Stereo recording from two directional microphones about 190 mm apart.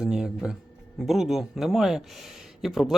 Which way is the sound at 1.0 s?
Centre (ahead or behind).